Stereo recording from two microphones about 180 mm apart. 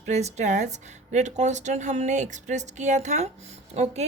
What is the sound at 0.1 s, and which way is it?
A woman's voice, 40° right (ahead or behind).